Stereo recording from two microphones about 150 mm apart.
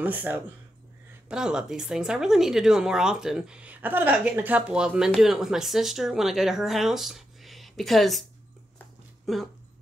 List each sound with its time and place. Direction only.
0.0 s speech: 10° right (ahead or behind)
9.2 s speech: centre (ahead or behind)